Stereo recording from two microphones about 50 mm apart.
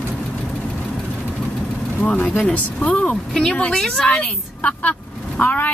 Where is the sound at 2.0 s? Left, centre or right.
Left.